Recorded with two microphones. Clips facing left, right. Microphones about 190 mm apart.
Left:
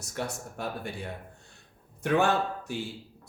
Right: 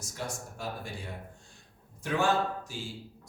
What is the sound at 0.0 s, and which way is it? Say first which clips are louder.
Speech: left 4 dB; 65° left (ahead or behind).